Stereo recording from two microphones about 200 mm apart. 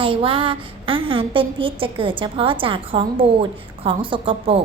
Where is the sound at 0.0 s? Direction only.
25° right (ahead or behind).